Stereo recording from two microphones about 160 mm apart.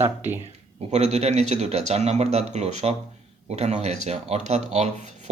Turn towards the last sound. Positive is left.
turn(degrees=-50)  # may be behind; listen again after turning